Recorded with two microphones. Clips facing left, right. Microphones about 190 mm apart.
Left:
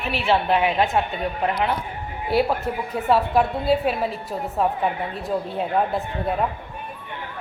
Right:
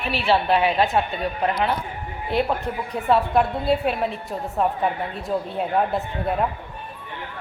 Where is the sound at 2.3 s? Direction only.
5° left (ahead or behind).